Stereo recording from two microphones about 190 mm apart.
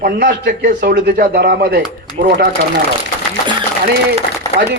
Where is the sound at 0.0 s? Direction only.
55° right (ahead or behind).